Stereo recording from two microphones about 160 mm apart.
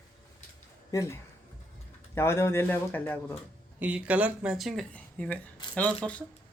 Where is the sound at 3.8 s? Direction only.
10° right (ahead or behind); by 5.4 s 10° left (ahead or behind).